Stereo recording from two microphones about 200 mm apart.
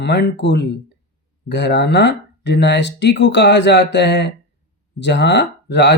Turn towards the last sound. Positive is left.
turn(degrees=60)  # may be behind; listen again after turning